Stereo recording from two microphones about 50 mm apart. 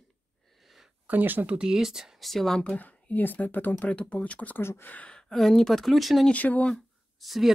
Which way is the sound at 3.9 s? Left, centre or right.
Left.